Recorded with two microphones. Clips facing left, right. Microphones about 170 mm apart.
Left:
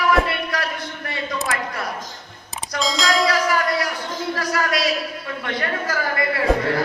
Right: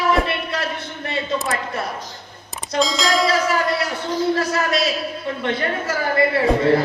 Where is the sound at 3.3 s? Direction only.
25° right (ahead or behind).